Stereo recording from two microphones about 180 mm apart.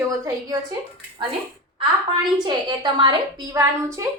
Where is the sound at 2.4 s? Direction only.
25° right (ahead or behind).